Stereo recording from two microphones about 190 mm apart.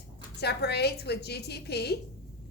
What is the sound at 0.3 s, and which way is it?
A woman's voice, 60° left (ahead or behind).